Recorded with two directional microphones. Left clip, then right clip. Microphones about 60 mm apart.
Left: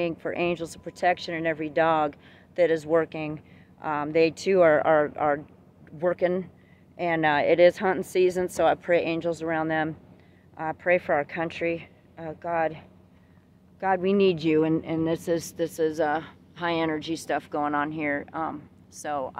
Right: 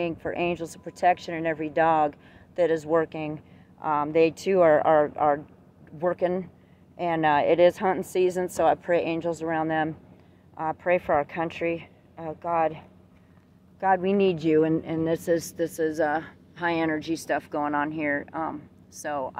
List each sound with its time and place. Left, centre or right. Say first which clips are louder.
0.0 s a woman's voice: even; left
10.5 s a woman's voice: even; left
13.7 s speech: right 1 dB; left
14.8 s speech: even; centre
15.0 s speech: right 4 dB; centre
15.3 s a woman's voice: right 1 dB; left
16.0 s a woman's voice: even; centre
16.6 s speech: right 1 dB; centre